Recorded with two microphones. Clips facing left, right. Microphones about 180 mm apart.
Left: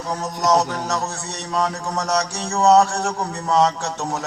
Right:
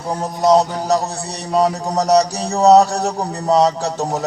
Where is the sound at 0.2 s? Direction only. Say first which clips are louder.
Right 6 dB; 30° right (ahead or behind).